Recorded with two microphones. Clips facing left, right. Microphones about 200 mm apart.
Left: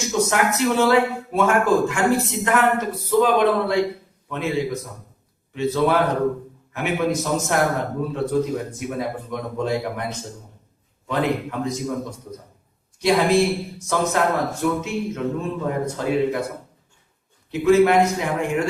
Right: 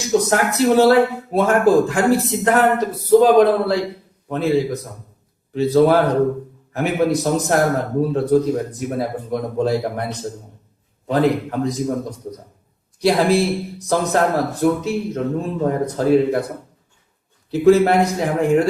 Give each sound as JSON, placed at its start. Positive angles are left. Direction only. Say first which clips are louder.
{"t": 0.1, "sound": "speech", "louder": "right 4 dB", "side_deg": -35}
{"t": 13.0, "sound": "speech", "louder": "right 2 dB", "side_deg": -35}
{"t": 17.5, "sound": "speech", "louder": "right 2 dB", "side_deg": -35}